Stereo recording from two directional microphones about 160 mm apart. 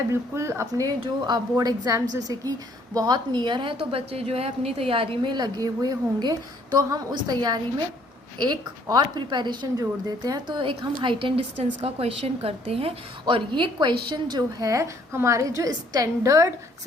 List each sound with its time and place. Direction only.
0.1 s a woman's voice: 15° right (ahead or behind)